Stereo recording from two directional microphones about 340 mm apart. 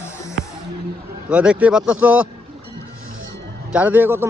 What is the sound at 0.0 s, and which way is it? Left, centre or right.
Music, centre.